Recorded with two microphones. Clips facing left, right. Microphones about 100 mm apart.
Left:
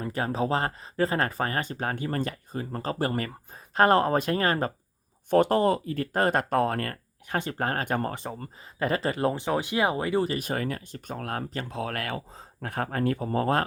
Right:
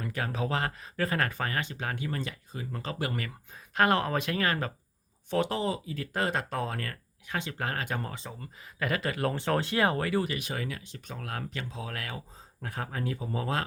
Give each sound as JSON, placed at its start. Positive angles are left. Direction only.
{"t": 0.0, "sound": "speech", "side_deg": 30}
{"t": 5.3, "sound": "speech", "side_deg": 50}
{"t": 8.6, "sound": "speech", "side_deg": 30}
{"t": 9.3, "sound": "speech", "side_deg": 15}
{"t": 10.3, "sound": "speech", "side_deg": 45}
{"t": 11.7, "sound": "speech", "side_deg": 60}